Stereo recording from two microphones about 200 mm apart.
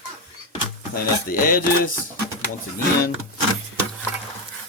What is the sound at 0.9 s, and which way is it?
Speech, 45° left (ahead or behind).